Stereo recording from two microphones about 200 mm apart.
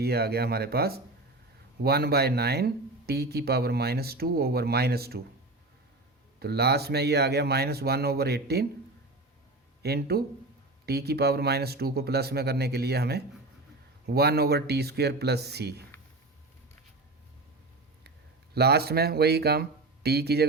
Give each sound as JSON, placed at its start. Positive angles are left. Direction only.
{"t": 0.0, "sound": "speech", "side_deg": -50}
{"t": 6.4, "sound": "speech", "side_deg": -55}
{"t": 9.8, "sound": "speech", "side_deg": -50}
{"t": 18.5, "sound": "speech", "side_deg": -55}